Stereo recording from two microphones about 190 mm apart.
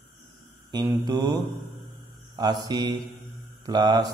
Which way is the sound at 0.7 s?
20° right (ahead or behind).